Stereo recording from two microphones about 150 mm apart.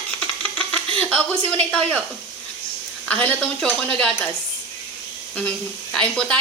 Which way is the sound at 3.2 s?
5° left (ahead or behind).